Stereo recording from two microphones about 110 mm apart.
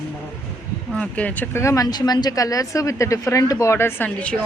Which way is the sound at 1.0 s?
10° left (ahead or behind).